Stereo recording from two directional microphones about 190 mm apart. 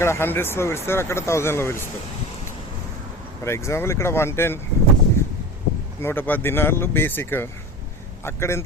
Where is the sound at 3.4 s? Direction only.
15° left (ahead or behind).